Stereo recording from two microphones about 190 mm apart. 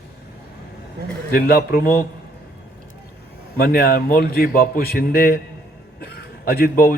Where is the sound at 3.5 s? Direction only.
50° left (ahead or behind).